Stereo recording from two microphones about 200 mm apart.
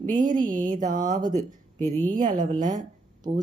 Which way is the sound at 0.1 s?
40° right (ahead or behind).